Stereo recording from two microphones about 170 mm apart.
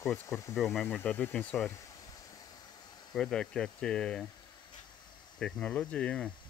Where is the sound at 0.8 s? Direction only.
10° left (ahead or behind).